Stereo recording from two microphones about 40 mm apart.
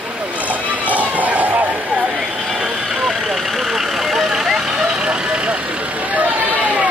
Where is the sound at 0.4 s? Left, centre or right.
Right.